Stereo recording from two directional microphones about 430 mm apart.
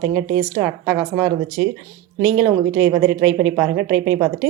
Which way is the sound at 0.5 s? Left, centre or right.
Centre.